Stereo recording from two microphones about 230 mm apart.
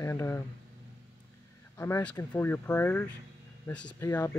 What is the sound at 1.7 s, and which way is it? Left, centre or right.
Speech, centre.